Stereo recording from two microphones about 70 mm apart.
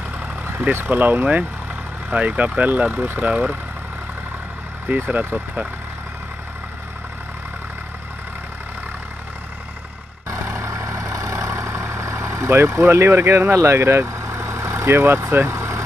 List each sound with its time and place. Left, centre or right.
0.7 s speech: right
4.8 s speech: right
10.3 s vehicle: right